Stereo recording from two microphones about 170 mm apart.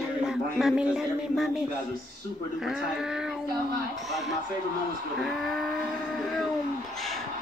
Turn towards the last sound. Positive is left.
turn(degrees=5)  # may be behind; listen again after turning